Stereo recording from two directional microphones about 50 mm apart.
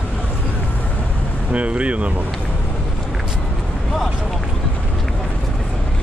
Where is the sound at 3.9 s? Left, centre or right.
Centre.